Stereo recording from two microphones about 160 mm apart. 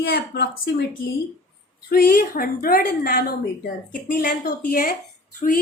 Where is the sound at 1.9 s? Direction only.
70° left (ahead or behind).